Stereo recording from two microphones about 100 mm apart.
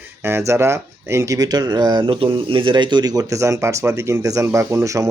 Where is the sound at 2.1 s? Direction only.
60° right (ahead or behind).